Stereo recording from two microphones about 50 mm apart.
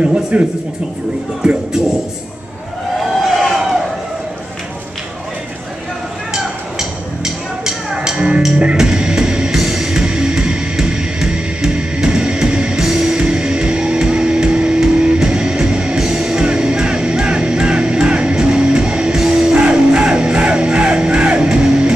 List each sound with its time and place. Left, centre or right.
0.0 s speech: right
3.3 s crowd: centre
6.3 s music: centre